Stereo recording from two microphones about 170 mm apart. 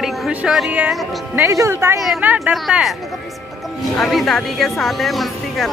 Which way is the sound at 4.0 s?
Centre (ahead or behind).